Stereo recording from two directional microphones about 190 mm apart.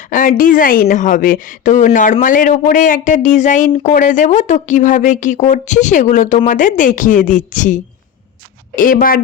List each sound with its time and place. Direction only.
0.0 s a woman's voice: 45° left (ahead or behind)